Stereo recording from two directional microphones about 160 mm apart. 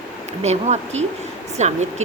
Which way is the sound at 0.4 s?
45° right (ahead or behind).